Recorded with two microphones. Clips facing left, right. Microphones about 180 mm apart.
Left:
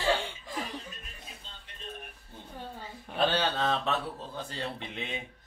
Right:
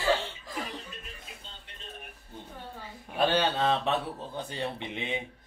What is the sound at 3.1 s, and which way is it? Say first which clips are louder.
A man's voice: right 2 dB; 10° right (ahead or behind).